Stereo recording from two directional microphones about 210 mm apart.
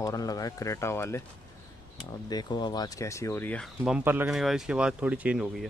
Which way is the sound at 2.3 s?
20° left (ahead or behind).